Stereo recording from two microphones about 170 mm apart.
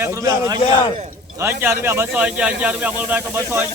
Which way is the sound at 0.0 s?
20° right (ahead or behind).